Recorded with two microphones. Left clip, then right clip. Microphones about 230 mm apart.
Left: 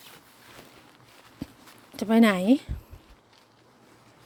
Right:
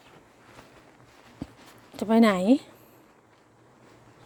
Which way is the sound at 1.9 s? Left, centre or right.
Centre.